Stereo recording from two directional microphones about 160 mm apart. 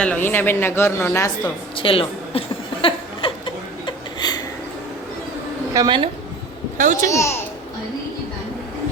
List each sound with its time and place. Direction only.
0.0 s a woman's voice: 10° left (ahead or behind)
1.7 s a woman's voice: 35° left (ahead or behind)
2.8 s chuckle: 30° left (ahead or behind)
5.7 s a woman's voice: 25° right (ahead or behind)
6.7 s a child's voice: 55° right (ahead or behind)
7.1 s a woman's voice: 20° left (ahead or behind)